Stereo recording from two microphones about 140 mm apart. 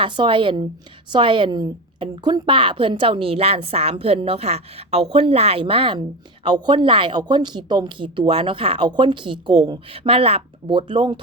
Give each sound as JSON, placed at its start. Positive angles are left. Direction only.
{"t": 0.0, "sound": "a woman's voice", "side_deg": -35}